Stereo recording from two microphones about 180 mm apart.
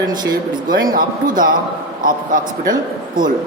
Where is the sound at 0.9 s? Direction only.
50° right (ahead or behind).